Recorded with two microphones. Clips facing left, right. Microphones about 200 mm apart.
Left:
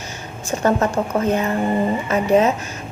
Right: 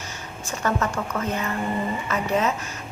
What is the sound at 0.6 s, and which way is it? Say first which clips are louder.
Speech: left 7 dB; 35° left (ahead or behind).